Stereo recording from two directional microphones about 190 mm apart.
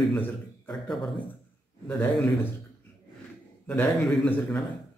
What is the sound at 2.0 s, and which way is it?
Speech, 10° left (ahead or behind).